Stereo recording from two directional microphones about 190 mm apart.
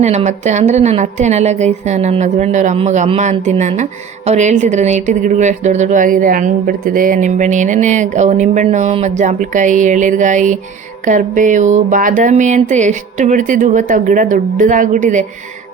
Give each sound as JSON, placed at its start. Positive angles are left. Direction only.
{"t": 0.0, "sound": "speech", "side_deg": -35}